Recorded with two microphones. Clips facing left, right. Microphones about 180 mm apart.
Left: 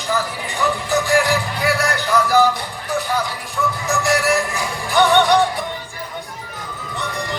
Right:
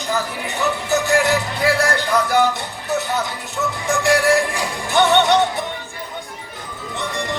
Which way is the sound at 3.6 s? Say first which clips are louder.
Even; 30° right (ahead or behind).